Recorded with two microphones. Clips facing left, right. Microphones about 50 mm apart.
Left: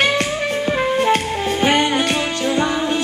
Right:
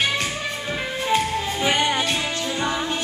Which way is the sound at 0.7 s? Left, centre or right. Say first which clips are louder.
Left 7 dB; left.